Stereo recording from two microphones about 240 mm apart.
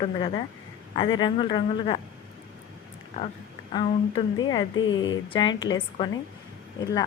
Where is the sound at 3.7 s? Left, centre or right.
Left.